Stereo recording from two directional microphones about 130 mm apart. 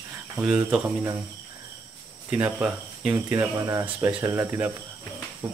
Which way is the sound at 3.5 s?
25° right (ahead or behind).